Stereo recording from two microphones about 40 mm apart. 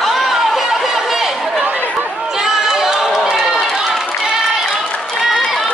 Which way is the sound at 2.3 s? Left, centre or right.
Centre.